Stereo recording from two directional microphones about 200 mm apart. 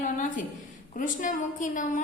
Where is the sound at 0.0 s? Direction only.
40° left (ahead or behind).